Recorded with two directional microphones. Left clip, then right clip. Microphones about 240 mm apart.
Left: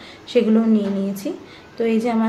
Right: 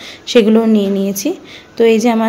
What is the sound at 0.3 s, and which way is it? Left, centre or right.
A woman's voice, right.